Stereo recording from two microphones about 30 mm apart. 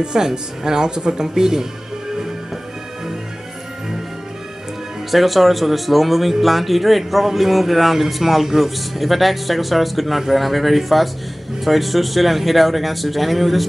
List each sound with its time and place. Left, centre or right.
0.0 s speech: right
5.1 s a man's voice: centre